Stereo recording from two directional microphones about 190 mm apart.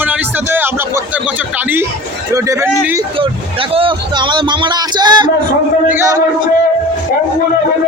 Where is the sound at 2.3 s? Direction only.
15° right (ahead or behind).